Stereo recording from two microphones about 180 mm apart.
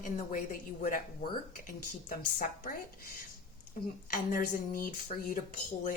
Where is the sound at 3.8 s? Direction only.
50° left (ahead or behind).